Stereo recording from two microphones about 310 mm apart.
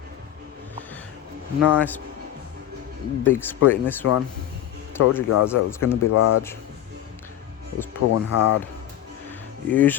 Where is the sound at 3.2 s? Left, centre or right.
Centre.